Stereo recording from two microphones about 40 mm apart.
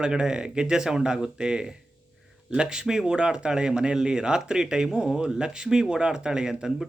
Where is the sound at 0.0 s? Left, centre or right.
Centre.